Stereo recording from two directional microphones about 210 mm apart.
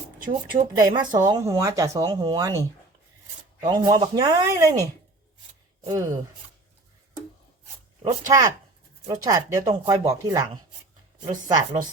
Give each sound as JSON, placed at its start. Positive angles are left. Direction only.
{"t": 0.5, "sound": "speech", "side_deg": -20}
{"t": 3.7, "sound": "speech", "side_deg": -20}
{"t": 8.0, "sound": "speech", "side_deg": -15}